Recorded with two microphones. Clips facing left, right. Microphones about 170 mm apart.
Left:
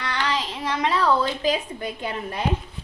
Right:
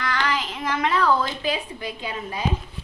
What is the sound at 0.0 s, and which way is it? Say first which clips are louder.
Child singing: right 1 dB; 30° left (ahead or behind).